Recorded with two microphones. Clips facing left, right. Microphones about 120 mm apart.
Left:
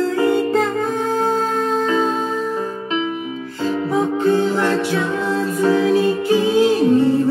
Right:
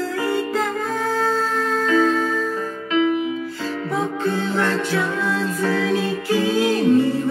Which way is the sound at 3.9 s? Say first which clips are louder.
Left 6 dB; 15° left (ahead or behind).